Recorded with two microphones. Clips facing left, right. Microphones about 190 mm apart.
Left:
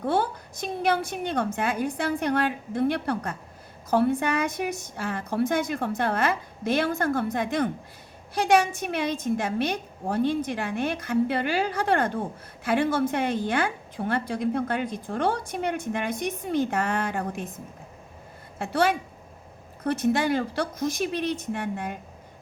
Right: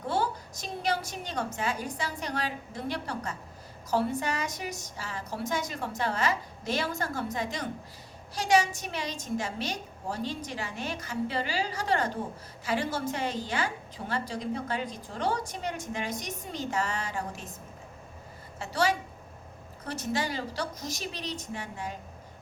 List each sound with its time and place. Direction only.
0.0 s a woman's voice: 55° left (ahead or behind)
18.6 s a woman's voice: 55° left (ahead or behind)